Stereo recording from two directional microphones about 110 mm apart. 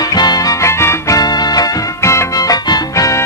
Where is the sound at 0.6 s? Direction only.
30° left (ahead or behind).